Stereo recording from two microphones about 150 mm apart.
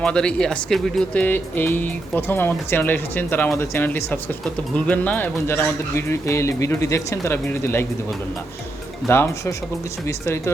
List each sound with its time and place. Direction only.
0.0 s speech: 5° left (ahead or behind)
9.0 s speech: 15° left (ahead or behind)